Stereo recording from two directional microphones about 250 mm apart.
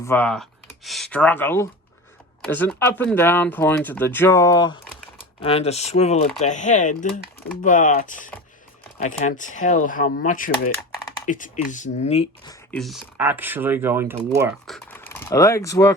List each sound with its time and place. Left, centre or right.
0.0 s speech: centre; by 12.5 s left
12.7 s speech: centre
14.7 s speech: centre